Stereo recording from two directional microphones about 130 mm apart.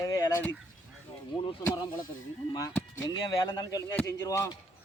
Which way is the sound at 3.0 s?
30° left (ahead or behind).